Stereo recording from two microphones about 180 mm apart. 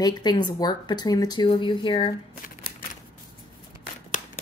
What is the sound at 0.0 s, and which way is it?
Speech, 25° left (ahead or behind).